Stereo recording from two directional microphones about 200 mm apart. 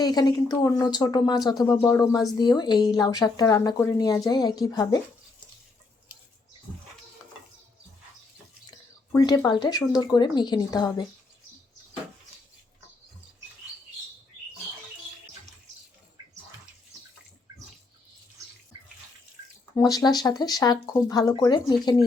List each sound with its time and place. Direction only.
0.0 s a woman's voice: 20° left (ahead or behind)
9.1 s speech: 15° left (ahead or behind)
19.7 s speech: 20° left (ahead or behind)